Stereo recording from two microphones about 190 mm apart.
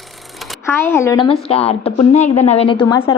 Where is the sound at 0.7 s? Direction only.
15° left (ahead or behind).